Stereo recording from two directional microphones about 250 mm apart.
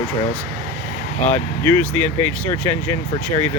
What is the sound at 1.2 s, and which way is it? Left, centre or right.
Speech, centre.